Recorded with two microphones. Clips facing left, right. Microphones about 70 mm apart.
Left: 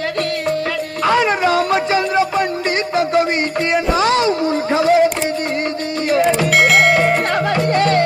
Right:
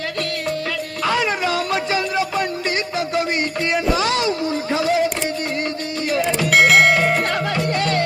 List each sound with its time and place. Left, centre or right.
1.0 s a sound: left
2.9 s music: left
3.7 s a sound: left
6.1 s music: left
6.5 s music: centre
7.3 s music: left